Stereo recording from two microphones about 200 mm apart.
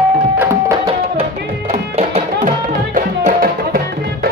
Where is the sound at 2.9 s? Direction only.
40° right (ahead or behind).